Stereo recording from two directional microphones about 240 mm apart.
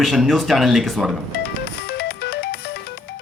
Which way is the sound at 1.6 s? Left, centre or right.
Left.